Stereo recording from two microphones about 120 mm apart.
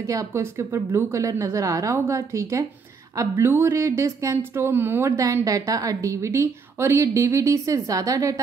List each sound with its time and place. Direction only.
0.0 s a woman's voice: 25° right (ahead or behind)